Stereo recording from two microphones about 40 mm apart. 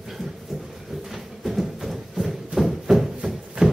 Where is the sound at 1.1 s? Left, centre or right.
Centre.